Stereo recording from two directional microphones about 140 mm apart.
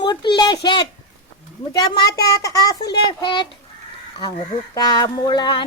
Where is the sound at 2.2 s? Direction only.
25° left (ahead or behind).